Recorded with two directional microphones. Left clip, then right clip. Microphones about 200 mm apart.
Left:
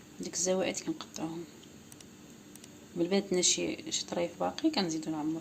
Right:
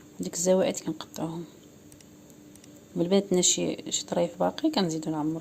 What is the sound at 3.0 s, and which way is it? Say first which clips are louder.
Speech: right 5 dB; 45° right (ahead or behind).